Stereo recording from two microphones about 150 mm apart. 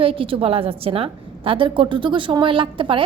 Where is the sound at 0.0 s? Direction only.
35° right (ahead or behind).